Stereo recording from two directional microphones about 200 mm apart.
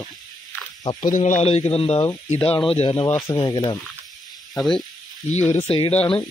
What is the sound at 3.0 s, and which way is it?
Speech, 10° left (ahead or behind).